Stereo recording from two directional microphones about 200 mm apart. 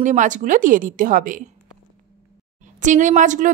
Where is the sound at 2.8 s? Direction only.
40° right (ahead or behind).